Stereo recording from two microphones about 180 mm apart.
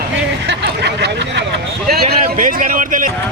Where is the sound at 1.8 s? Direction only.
60° right (ahead or behind).